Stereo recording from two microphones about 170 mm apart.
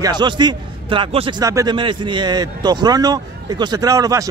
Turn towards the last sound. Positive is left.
turn(degrees=-20)  # may be behind; listen again after turning